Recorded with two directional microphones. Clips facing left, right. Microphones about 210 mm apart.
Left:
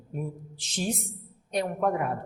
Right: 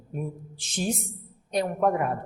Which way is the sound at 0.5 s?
55° right (ahead or behind).